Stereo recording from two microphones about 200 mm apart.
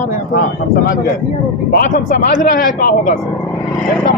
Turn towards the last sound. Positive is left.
turn(degrees=45)  # may be behind; listen again after turning